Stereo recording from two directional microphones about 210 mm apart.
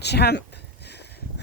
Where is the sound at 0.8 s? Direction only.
50° left (ahead or behind).